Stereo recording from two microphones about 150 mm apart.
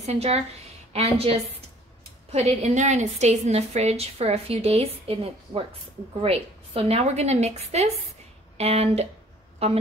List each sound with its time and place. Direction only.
0.0 s a woman's voice: 45° right (ahead or behind)
2.6 s a woman's voice: 50° right (ahead or behind)